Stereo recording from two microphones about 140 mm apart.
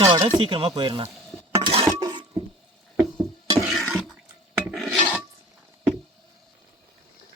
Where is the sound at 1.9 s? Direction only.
30° right (ahead or behind).